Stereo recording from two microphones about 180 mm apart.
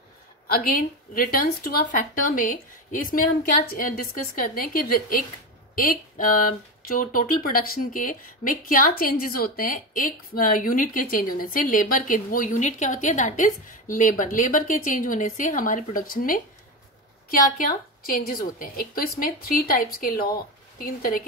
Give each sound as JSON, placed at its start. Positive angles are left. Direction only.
{"t": 0.5, "sound": "speech", "side_deg": 55}
{"t": 17.6, "sound": "speech", "side_deg": 50}